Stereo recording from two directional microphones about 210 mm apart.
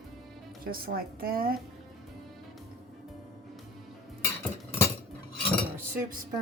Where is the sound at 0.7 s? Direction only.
45° right (ahead or behind).